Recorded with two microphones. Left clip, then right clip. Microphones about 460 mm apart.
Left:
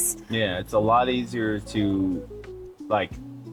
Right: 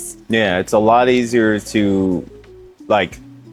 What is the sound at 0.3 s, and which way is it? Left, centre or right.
Speech, right.